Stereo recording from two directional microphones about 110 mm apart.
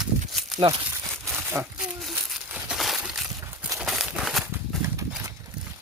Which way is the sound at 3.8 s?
Centre (ahead or behind).